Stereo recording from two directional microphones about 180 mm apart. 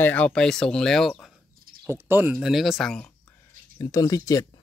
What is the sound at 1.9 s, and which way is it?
Speech, 15° right (ahead or behind).